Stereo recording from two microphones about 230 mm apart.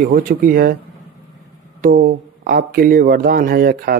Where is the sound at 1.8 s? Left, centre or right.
Right.